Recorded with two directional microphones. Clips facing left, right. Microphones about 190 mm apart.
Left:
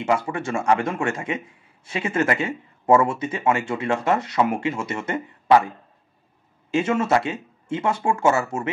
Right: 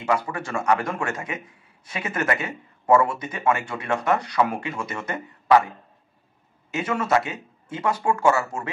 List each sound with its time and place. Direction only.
0.0 s speech: 25° left (ahead or behind)
6.7 s speech: 25° left (ahead or behind)